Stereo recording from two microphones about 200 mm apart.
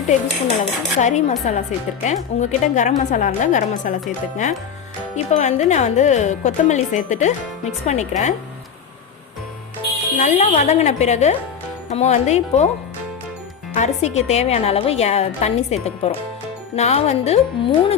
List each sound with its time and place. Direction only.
0.4 s speech: 35° left (ahead or behind)
5.1 s speech: 35° left (ahead or behind)
10.2 s speech: 35° left (ahead or behind)
13.7 s speech: 35° left (ahead or behind)